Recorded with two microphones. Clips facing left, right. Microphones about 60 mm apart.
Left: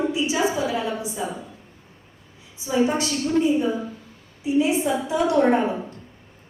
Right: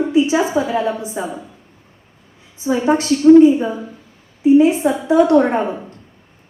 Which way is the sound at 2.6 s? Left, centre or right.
Right.